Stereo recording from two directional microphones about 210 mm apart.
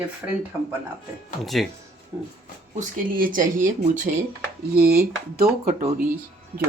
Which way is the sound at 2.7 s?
40° right (ahead or behind).